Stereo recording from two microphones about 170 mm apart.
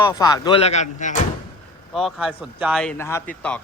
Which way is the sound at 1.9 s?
Centre (ahead or behind).